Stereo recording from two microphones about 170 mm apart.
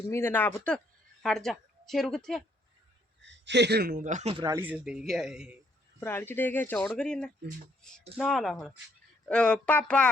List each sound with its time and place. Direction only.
0.1 s a woman's voice: 15° left (ahead or behind)
3.2 s speech: 90° right; by 4.4 s 40° right (ahead or behind)
4.6 s speech: 5° right (ahead or behind)
6.0 s speech: 15° left (ahead or behind)